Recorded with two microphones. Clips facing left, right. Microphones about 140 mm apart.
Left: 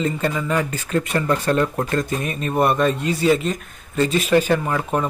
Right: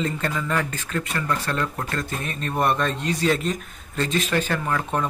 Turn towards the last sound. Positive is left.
turn(degrees=10)  # may be behind; listen again after turning